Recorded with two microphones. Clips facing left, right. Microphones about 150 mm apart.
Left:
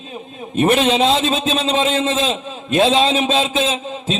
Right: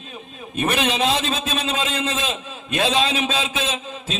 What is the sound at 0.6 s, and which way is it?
A man's voice, 30° left (ahead or behind).